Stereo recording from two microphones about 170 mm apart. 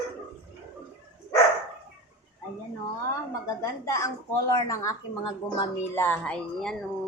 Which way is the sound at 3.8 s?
20° left (ahead or behind).